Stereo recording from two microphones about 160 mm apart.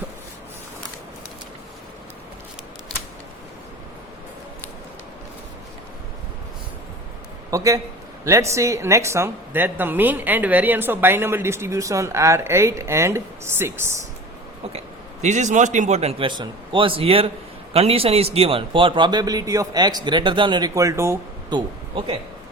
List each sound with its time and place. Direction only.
7.5 s a woman's voice: 20° right (ahead or behind)
15.2 s a man's voice: 45° right (ahead or behind); by 21.2 s 15° right (ahead or behind)
21.5 s speech: 35° right (ahead or behind)